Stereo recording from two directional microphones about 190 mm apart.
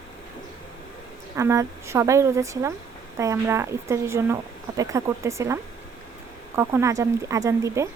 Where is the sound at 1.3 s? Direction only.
15° right (ahead or behind).